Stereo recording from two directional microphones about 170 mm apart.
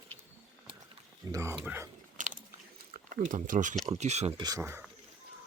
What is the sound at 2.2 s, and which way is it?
Biting, 50° right (ahead or behind).